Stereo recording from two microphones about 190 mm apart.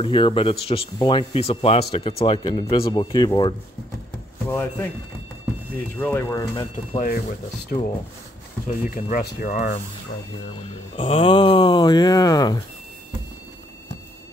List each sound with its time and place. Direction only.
0.0 s speech: 25° left (ahead or behind)
4.5 s speech: 10° left (ahead or behind)
5.9 s speech: 10° left (ahead or behind)
7.0 s speech: 45° left (ahead or behind)
8.9 s speech: 45° left (ahead or behind)
11.0 s speech: 25° left (ahead or behind)